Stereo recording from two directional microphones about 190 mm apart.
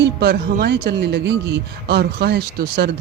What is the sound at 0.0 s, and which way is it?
Speech, 60° right (ahead or behind).